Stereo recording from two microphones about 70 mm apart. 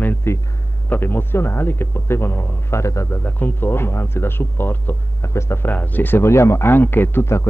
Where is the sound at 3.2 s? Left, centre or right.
Left.